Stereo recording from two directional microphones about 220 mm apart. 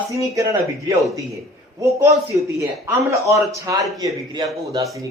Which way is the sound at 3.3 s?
15° right (ahead or behind).